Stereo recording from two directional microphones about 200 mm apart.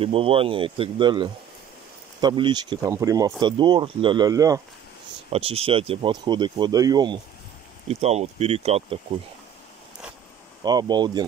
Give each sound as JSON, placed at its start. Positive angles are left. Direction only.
{"t": 0.0, "sound": "speech", "side_deg": -25}
{"t": 5.3, "sound": "speech", "side_deg": -30}
{"t": 7.9, "sound": "speech", "side_deg": -30}
{"t": 10.6, "sound": "speech", "side_deg": -20}